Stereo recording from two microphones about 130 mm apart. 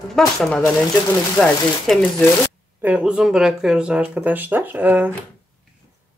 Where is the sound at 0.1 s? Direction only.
5° left (ahead or behind).